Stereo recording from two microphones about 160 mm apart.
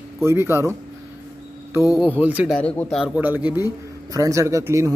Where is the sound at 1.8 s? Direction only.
5° right (ahead or behind).